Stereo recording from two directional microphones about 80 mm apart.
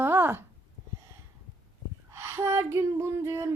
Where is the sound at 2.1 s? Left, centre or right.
Right.